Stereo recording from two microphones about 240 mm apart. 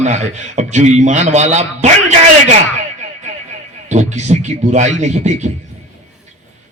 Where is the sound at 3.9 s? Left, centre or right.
Right.